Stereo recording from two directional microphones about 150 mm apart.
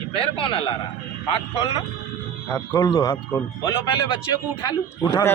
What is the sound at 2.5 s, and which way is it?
A man's voice, 10° left (ahead or behind).